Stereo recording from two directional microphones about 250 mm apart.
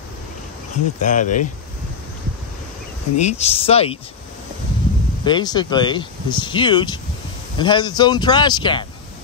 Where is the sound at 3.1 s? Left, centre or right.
Left.